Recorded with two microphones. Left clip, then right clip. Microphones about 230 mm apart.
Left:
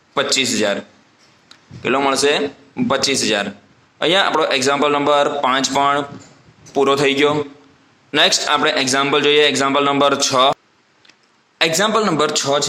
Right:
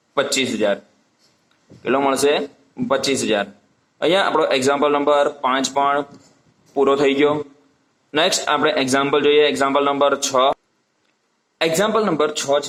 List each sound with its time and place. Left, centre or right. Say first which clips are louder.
0.1 s a man's voice: left 2 dB; left